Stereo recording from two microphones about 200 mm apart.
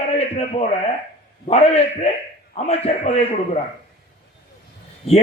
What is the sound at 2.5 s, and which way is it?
Speech, 35° left (ahead or behind).